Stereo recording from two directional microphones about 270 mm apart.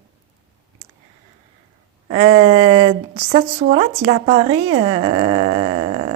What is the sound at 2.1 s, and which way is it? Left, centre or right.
Dog, centre.